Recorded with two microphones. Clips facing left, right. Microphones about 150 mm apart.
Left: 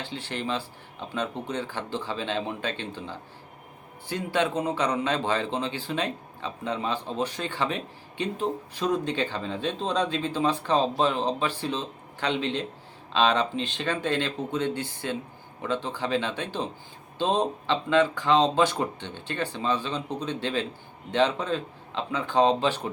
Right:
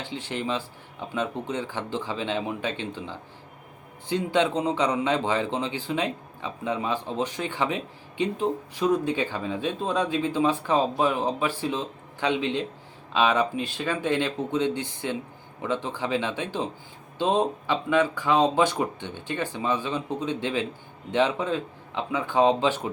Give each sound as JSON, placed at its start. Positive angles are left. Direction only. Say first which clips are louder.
{"t": 0.0, "sound": "a man's voice", "louder": "right 2 dB", "side_deg": -15}